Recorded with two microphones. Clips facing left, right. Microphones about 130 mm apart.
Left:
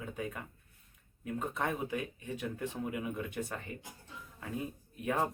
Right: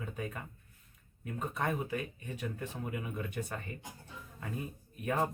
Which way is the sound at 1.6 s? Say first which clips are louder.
Right 2 dB; 10° left (ahead or behind).